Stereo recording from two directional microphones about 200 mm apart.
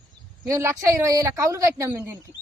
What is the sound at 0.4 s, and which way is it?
Speech, 15° right (ahead or behind).